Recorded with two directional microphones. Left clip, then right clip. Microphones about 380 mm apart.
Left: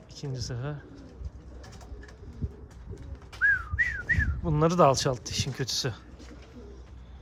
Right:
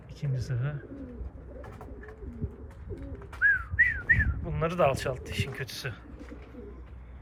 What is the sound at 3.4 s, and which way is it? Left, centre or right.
Whistling, centre.